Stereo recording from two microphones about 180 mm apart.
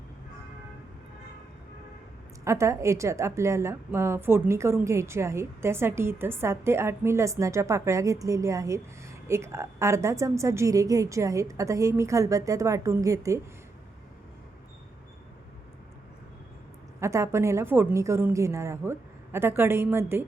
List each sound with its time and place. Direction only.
2.4 s a woman's voice: 15° right (ahead or behind)
17.0 s a woman's voice: 15° right (ahead or behind)